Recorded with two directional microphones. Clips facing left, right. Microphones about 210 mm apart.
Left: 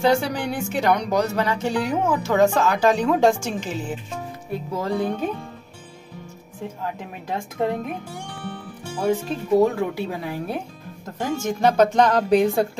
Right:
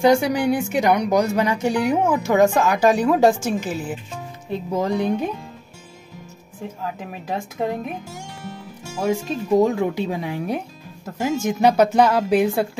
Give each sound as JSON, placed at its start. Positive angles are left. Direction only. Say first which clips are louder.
{"t": 0.0, "sound": "a woman's voice", "louder": "right 4 dB", "side_deg": -15}
{"t": 4.5, "sound": "a woman's voice", "louder": "right 4 dB", "side_deg": -20}
{"t": 7.6, "sound": "speech", "louder": "left 1 dB", "side_deg": -5}
{"t": 9.1, "sound": "a woman's voice", "louder": "right 1 dB", "side_deg": -15}